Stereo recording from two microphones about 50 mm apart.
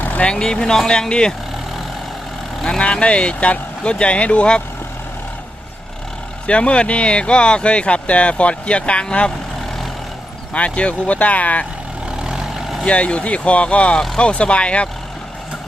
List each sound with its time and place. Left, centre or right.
0.2 s speech: centre
2.6 s speech: centre
6.5 s speech: left
10.5 s speech: left
12.8 s speech: left